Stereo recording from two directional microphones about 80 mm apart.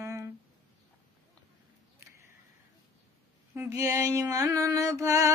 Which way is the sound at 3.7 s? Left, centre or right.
Right.